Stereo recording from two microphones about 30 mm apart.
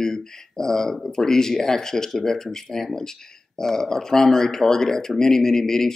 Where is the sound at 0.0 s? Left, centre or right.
Centre.